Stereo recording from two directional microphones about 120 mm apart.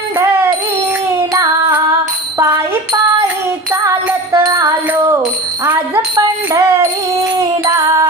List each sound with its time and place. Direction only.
3.7 s music: 25° right (ahead or behind)
6.1 s bicycle bell: 30° right (ahead or behind)